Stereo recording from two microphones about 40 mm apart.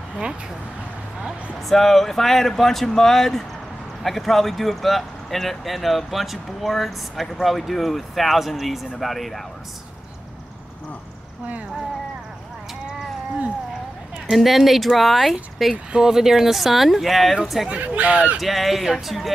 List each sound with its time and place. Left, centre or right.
1.7 s speech: centre
14.3 s speech: centre
15.7 s speech: centre
17.6 s speech: right
18.4 s speech: centre